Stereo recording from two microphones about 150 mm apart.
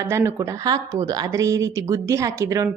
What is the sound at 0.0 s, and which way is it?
Speech, 15° right (ahead or behind).